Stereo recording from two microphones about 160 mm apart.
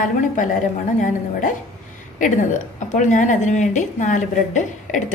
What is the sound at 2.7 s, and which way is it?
A woman's voice, 50° left (ahead or behind).